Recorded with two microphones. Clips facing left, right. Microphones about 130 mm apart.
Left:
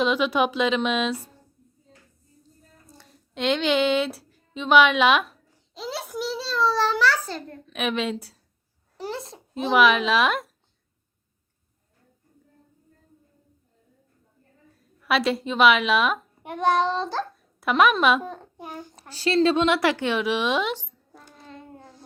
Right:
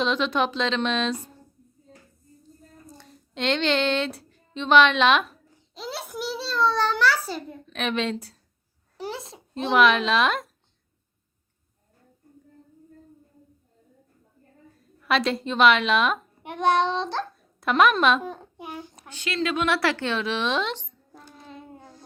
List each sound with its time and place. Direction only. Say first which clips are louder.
0.0 s speech: left 2 dB; 10° left (ahead or behind)
3.0 s music: left 2 dB; 5° left (ahead or behind)
7.7 s a woman's voice: left 1 dB; 5° left (ahead or behind)
15.0 s a child's voice: left 1 dB; 5° left (ahead or behind)
19.1 s a woman's voice: left 7 dB; 35° left (ahead or behind)
19.6 s speech: left 3 dB; 20° left (ahead or behind)
21.3 s child singing: even; 5° right (ahead or behind)